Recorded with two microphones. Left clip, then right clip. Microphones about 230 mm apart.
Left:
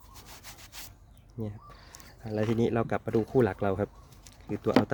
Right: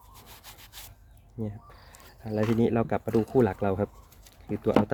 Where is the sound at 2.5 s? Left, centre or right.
Centre.